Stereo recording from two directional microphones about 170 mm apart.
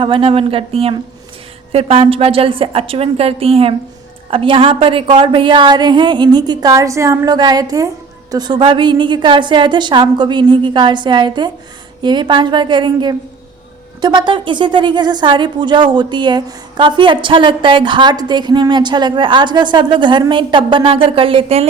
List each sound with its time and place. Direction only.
0.0 s a woman's voice: 35° right (ahead or behind)